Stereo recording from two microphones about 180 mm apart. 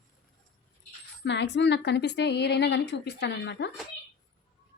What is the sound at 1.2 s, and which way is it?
A woman's voice, 80° left.